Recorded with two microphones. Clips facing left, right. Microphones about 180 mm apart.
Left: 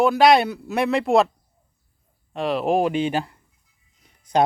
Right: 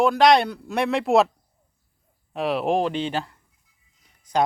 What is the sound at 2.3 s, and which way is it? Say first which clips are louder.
Speech: left 1 dB; centre (ahead or behind).